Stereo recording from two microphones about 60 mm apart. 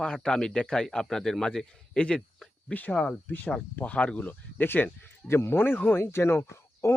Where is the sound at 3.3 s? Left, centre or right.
Left.